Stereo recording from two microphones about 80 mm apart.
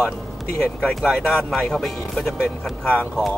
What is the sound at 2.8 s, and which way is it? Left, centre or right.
Speech, left.